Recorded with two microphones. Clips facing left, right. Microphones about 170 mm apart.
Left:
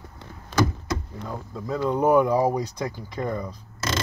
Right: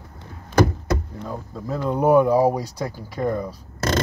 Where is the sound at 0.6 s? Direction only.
60° right (ahead or behind).